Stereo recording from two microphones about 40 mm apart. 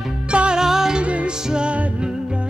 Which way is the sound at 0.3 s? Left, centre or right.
Right.